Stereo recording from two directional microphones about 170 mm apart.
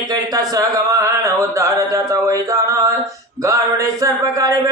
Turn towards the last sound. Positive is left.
turn(degrees=-20)  # may be behind; listen again after turning